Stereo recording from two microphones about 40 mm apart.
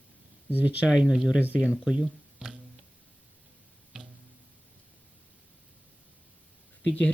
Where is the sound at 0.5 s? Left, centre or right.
Right.